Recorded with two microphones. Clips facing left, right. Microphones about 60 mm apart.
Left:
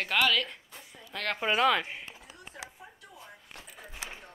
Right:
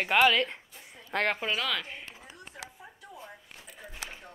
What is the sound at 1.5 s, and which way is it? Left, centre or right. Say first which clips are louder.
Speech: left 6 dB; left.